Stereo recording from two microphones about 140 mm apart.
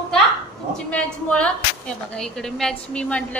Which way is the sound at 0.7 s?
5° left (ahead or behind).